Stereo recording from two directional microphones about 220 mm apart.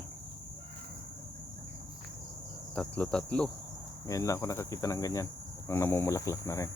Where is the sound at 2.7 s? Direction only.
5° left (ahead or behind).